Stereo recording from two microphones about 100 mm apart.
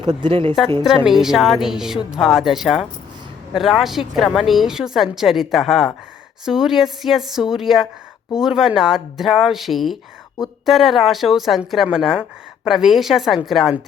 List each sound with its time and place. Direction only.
0.0 s speech: 45° right (ahead or behind)
0.3 s speech: 65° right (ahead or behind)
0.8 s a woman's voice: 5° right (ahead or behind)